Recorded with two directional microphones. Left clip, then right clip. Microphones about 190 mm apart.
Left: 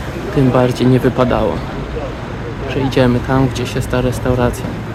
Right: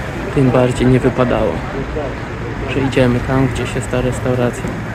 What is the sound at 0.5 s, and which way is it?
Speech, 15° left (ahead or behind).